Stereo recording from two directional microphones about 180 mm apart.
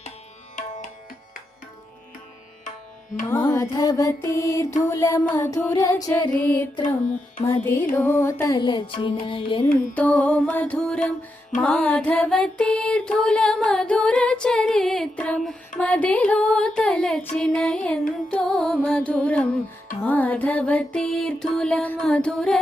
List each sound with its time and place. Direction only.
3.2 s music: 20° left (ahead or behind)
7.9 s music: 10° left (ahead or behind); by 9.6 s 30° left (ahead or behind)
9.9 s music: 10° left (ahead or behind)